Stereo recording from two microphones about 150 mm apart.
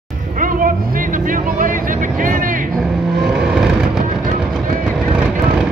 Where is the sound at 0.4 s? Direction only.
65° right (ahead or behind).